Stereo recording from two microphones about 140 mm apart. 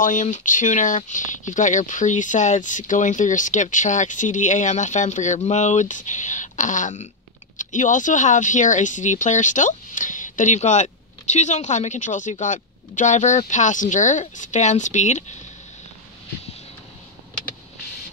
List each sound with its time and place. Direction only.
0.0 s speech: 65° left (ahead or behind)